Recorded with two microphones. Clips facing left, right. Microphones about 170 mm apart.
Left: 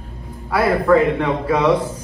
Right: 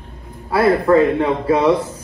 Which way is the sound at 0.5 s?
30° right (ahead or behind).